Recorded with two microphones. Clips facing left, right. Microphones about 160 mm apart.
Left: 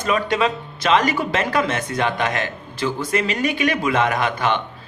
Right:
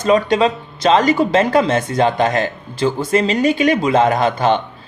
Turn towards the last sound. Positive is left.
turn(degrees=-30)  # may be behind; listen again after turning